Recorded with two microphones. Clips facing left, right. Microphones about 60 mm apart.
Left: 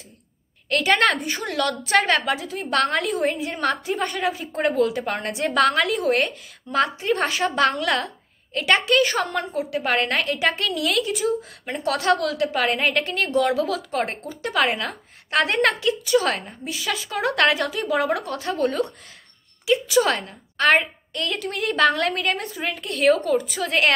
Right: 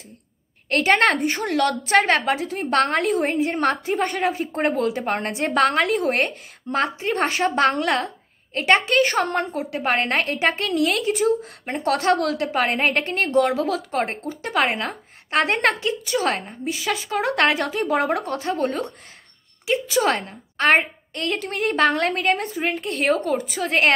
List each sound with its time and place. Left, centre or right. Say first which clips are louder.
0.7 s a woman's voice: right 1 dB; right
7.2 s a woman's voice: right 2 dB; right
7.5 s a woman's voice: even; right
9.0 s a woman's voice: right 2 dB; right
9.7 s a woman's voice: left 1 dB; right
11.7 s a woman's voice: right 1 dB; right
12.4 s a woman's voice: even; right
13.9 s a woman's voice: right 1 dB; right
20.2 s a woman's voice: even; right